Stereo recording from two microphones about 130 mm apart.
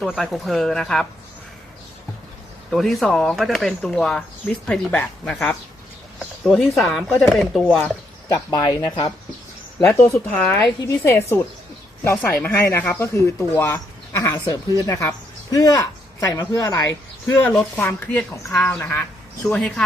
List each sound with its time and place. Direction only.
0.0 s speech: centre (ahead or behind)
2.6 s speech: centre (ahead or behind)
8.3 s speech: 30° left (ahead or behind)
9.9 s speech: 20° left (ahead or behind)
17.4 s speech: 10° left (ahead or behind)